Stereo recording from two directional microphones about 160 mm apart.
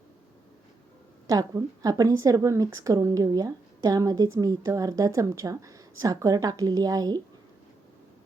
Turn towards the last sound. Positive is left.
turn(degrees=-25)  # may be behind; listen again after turning